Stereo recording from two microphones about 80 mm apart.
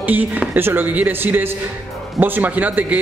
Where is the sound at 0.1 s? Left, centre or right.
Right.